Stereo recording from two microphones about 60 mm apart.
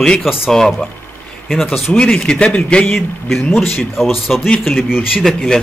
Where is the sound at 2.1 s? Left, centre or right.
Centre.